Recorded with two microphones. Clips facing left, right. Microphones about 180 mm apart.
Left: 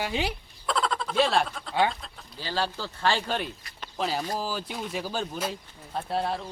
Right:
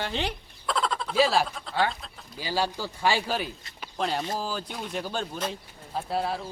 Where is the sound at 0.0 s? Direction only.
10° left (ahead or behind).